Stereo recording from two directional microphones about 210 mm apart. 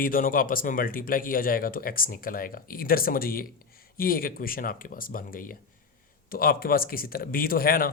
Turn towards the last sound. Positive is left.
turn(degrees=45)  # may be behind; listen again after turning